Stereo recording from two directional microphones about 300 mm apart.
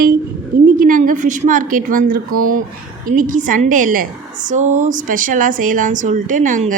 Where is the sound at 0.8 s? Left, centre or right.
Right.